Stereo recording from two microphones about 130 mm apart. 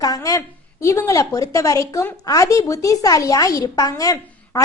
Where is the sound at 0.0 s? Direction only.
25° left (ahead or behind).